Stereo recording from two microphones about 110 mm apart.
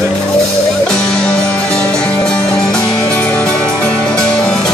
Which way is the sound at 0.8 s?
5° left (ahead or behind).